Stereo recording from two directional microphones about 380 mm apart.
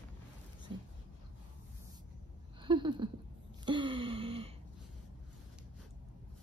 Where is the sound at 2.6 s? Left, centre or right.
Centre.